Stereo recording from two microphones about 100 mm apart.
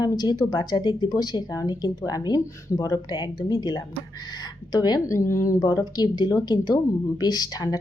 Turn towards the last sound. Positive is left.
turn(degrees=40)  # may be behind; listen again after turning